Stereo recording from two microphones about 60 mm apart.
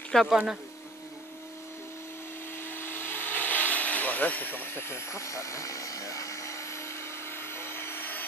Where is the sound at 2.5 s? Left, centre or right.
Left.